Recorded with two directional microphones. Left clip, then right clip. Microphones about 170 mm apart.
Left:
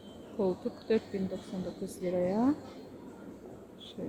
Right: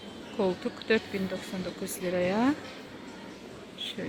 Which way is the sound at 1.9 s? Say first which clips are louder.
Right 3 dB; 10° left (ahead or behind).